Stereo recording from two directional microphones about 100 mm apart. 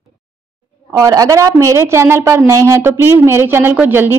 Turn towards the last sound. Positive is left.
turn(degrees=-20)  # may be behind; listen again after turning